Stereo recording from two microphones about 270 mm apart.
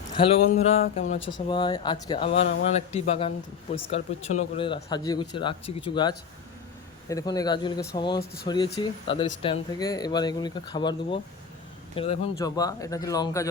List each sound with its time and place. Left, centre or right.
0.2 s speech: left
1.3 s speech: centre